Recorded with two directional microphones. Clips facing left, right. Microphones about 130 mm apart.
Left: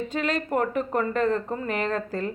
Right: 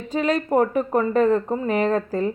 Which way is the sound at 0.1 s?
40° right (ahead or behind).